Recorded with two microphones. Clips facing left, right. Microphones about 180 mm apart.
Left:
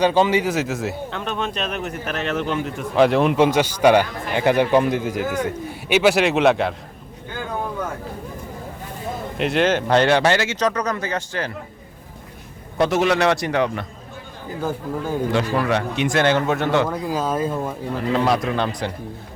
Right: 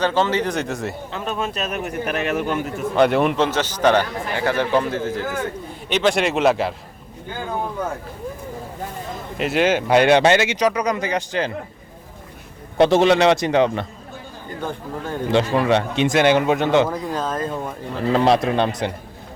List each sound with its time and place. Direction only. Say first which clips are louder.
0.0 s speech: left 2 dB; 15° left (ahead or behind)
3.3 s a man's voice: left 4 dB; 10° left (ahead or behind)
9.4 s speech: even; 5° right (ahead or behind)
12.7 s speech: right 4 dB; 25° right (ahead or behind)
14.6 s a man's voice: left 3 dB; 5° left (ahead or behind)
15.3 s speech: right 5 dB; 25° right (ahead or behind)
16.9 s a man's voice: left 2 dB; 5° left (ahead or behind)
18.1 s speech: right 4 dB; 25° right (ahead or behind)